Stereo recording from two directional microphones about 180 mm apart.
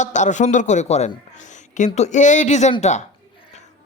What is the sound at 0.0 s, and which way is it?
A man's voice, 40° left (ahead or behind).